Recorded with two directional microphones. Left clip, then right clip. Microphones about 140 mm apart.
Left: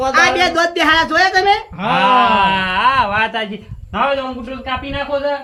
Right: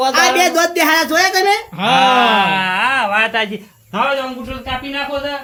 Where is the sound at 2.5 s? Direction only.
15° left (ahead or behind).